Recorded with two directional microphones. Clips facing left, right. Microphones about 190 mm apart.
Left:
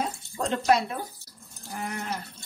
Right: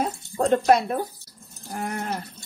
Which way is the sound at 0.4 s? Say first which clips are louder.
Right 5 dB; 45° right (ahead or behind).